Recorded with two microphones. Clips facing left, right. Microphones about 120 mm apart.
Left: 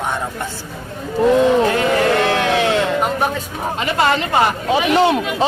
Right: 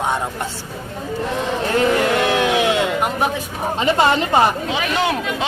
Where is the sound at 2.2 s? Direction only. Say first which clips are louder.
Even; 15° right (ahead or behind).